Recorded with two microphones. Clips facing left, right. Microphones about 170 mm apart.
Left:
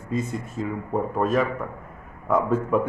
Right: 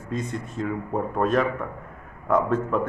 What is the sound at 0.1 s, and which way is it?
A man's voice, 5° left (ahead or behind).